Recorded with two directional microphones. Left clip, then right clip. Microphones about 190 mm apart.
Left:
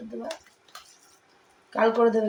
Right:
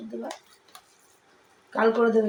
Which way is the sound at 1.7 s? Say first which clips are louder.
Left 1 dB; 20° right (ahead or behind).